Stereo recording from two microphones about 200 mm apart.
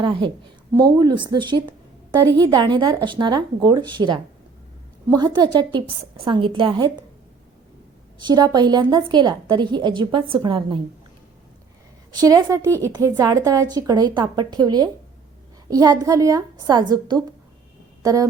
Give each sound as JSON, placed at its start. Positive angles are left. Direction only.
{"t": 0.0, "sound": "a woman's voice", "side_deg": -25}
{"t": 8.2, "sound": "a woman's voice", "side_deg": -20}
{"t": 12.2, "sound": "a woman's voice", "side_deg": -20}